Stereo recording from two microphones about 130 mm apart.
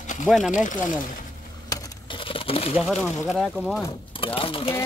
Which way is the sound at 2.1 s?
45° left (ahead or behind).